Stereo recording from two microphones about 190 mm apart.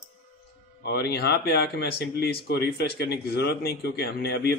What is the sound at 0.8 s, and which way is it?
Speech, 60° left (ahead or behind).